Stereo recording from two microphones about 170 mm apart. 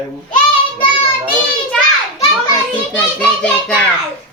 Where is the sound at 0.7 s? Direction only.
30° left (ahead or behind).